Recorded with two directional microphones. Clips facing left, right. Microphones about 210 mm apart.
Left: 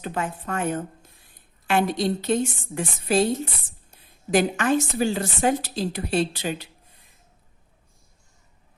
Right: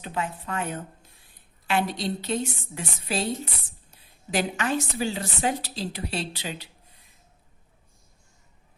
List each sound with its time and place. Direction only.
0.0 s a woman's voice: 50° left (ahead or behind)